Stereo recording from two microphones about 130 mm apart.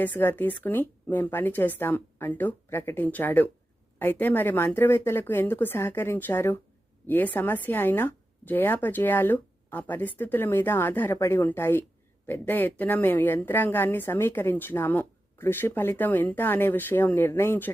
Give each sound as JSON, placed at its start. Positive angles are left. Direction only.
{"t": 0.0, "sound": "a woman's voice", "side_deg": 15}